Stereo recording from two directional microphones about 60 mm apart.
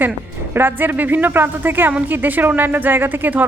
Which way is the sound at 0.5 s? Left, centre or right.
Right.